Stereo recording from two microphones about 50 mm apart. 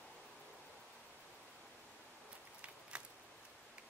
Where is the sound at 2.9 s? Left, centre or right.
Right.